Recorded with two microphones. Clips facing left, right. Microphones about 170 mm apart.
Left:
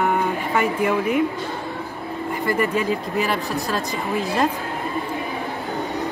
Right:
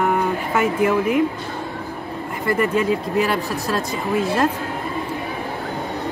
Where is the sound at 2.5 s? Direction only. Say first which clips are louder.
Right 3 dB; centre (ahead or behind).